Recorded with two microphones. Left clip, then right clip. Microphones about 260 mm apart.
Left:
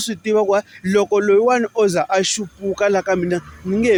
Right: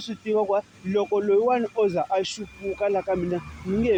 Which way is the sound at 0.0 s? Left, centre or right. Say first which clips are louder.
Left 7 dB; left.